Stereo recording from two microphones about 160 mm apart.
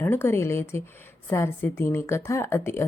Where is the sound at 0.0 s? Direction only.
15° left (ahead or behind).